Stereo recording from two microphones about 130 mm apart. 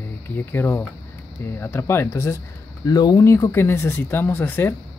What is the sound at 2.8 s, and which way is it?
Speech, 30° left (ahead or behind).